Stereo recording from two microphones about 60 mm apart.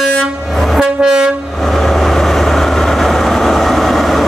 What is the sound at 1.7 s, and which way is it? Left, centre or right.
Vehicle, centre.